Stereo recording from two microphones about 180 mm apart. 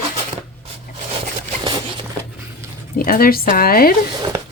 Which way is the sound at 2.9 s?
50° left (ahead or behind).